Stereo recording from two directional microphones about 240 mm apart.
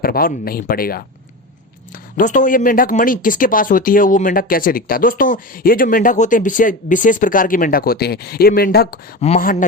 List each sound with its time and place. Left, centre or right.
0.0 s speech: left
2.1 s speech: left